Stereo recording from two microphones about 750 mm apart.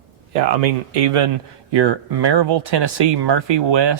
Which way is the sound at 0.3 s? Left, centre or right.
Right.